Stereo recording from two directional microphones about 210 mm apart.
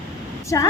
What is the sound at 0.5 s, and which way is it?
Speech, 15° left (ahead or behind).